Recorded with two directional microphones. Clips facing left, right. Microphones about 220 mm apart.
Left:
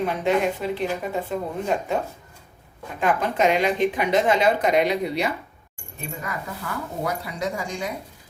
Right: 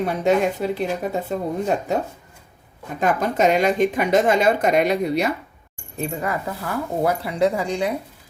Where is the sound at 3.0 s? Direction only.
40° right (ahead or behind).